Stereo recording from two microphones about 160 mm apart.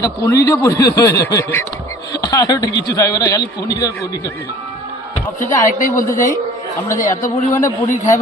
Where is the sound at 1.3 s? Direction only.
20° left (ahead or behind).